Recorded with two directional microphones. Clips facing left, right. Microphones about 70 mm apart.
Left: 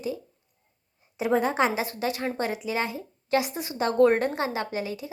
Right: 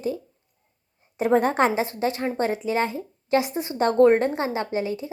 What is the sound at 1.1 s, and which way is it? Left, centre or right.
Speech, right.